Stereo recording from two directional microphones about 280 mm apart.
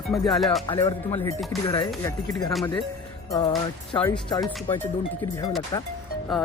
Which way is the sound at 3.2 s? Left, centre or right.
Centre.